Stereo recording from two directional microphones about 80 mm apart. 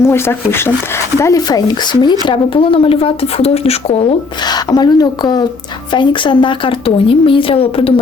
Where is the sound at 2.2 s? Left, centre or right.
Left.